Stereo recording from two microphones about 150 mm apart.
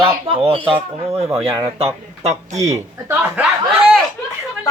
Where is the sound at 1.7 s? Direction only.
40° right (ahead or behind).